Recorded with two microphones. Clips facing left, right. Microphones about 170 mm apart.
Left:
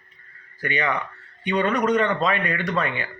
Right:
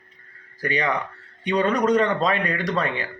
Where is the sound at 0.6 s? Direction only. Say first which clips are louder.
Right 1 dB; 35° right (ahead or behind).